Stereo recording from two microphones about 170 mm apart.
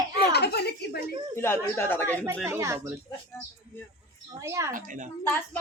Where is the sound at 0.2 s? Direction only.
70° left (ahead or behind).